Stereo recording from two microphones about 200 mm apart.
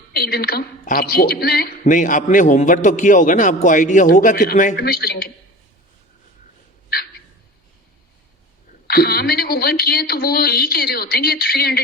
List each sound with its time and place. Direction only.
0.1 s a woman's voice: 50° left (ahead or behind)
8.9 s a woman's voice: 50° left (ahead or behind)